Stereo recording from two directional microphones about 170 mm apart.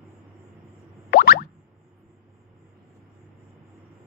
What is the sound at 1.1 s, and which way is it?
Boing, 65° left (ahead or behind).